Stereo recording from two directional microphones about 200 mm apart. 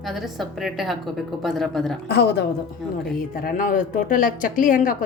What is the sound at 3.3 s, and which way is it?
Speech, 45° left (ahead or behind).